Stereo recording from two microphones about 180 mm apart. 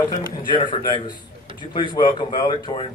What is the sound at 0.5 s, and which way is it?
Speech, 25° left (ahead or behind).